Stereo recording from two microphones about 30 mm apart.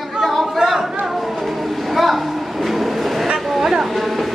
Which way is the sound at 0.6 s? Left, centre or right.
Centre.